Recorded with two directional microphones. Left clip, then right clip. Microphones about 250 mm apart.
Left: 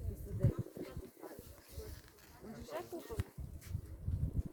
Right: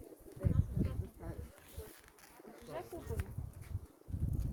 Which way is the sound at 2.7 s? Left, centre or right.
Left.